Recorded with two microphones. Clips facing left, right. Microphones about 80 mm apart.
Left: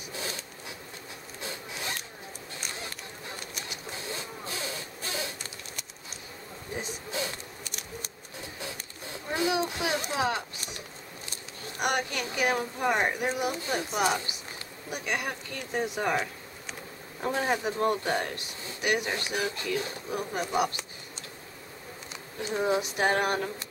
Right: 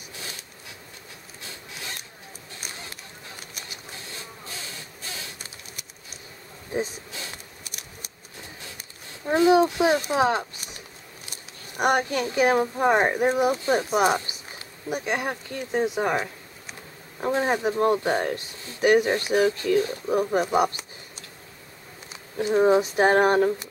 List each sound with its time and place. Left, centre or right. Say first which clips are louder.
9.3 s speech: right 10 dB; right
11.8 s speech: right 7 dB; right
15.1 s speech: right 5 dB; right
17.3 s speech: right 5 dB; right
18.8 s speech: right 10 dB; right
22.5 s speech: right 9 dB; right